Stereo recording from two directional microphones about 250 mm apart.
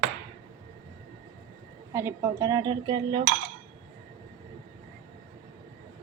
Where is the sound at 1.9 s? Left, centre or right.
Centre.